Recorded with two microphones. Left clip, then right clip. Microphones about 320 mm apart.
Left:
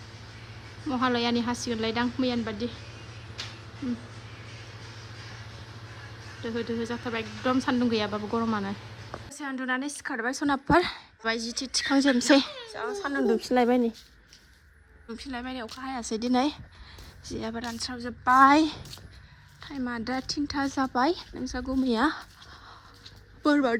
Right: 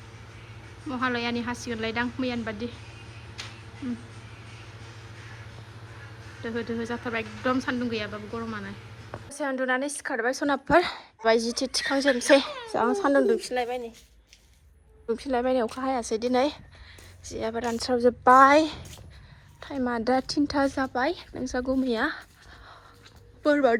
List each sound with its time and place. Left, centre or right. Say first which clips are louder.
0.9 s speech: left 2 dB; centre
6.4 s a woman's voice: even; centre
12.2 s speech: right 2 dB; centre
15.0 s speech: right 11 dB; centre
19.9 s a woman's voice: right 7 dB; centre
23.4 s speech: right 3 dB; centre